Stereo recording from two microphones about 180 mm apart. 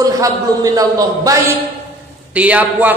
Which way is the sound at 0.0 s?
20° right (ahead or behind).